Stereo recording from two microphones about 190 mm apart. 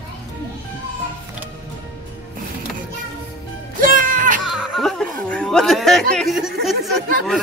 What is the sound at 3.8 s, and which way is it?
Music, 45° right (ahead or behind).